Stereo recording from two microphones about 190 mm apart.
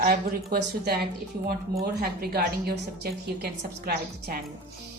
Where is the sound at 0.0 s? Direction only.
50° right (ahead or behind).